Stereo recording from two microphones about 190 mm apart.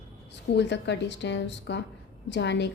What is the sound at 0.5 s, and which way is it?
A woman's voice, 65° left (ahead or behind).